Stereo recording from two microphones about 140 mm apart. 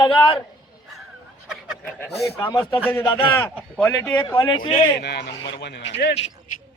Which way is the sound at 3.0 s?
40° left (ahead or behind).